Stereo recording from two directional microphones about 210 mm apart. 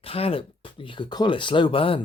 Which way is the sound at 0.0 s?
25° left (ahead or behind).